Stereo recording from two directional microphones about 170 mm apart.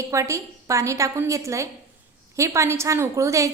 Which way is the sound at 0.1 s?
15° right (ahead or behind).